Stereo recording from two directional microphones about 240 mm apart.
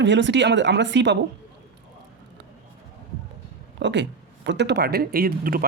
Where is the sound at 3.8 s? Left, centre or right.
Right.